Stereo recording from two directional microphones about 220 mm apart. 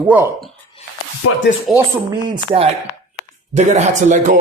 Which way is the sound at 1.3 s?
90° left.